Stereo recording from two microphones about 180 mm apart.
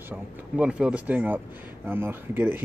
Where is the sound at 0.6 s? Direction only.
5° right (ahead or behind).